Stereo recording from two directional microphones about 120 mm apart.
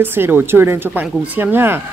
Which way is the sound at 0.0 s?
15° right (ahead or behind).